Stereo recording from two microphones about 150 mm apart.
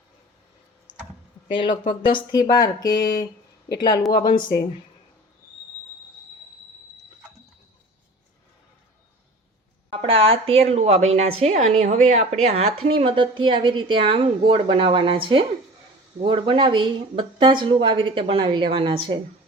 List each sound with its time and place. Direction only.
0.9 s typing: 30° right (ahead or behind)
1.5 s speech: 35° left (ahead or behind)
10.1 s a woman's voice: 40° right (ahead or behind)